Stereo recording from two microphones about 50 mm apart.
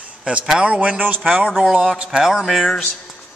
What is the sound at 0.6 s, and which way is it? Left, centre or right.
Speech, right.